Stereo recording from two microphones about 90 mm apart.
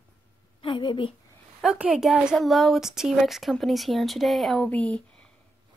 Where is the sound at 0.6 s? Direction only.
65° left (ahead or behind).